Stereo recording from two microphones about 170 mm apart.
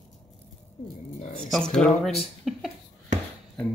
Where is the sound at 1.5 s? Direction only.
5° left (ahead or behind).